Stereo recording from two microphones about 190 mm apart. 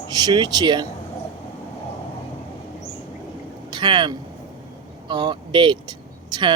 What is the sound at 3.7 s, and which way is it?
Speech, 25° right (ahead or behind).